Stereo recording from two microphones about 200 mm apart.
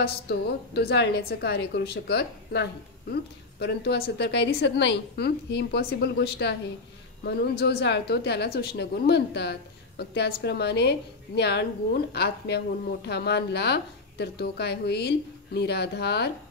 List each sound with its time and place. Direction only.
0.0 s a woman's voice: 55° left (ahead or behind)